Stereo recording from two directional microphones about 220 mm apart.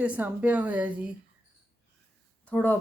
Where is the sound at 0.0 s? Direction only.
5° right (ahead or behind).